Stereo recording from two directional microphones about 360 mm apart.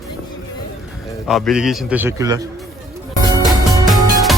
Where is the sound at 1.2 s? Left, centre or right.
Centre.